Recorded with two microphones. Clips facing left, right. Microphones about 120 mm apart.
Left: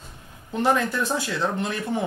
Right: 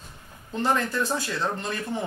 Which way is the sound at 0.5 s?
15° left (ahead or behind).